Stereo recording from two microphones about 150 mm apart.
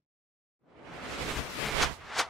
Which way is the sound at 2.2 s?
Centre (ahead or behind).